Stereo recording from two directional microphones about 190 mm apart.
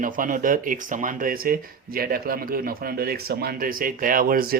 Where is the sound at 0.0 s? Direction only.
45° right (ahead or behind).